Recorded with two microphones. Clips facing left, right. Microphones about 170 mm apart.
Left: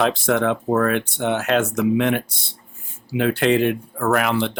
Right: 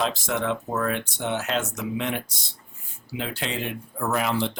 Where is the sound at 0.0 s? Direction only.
60° left (ahead or behind).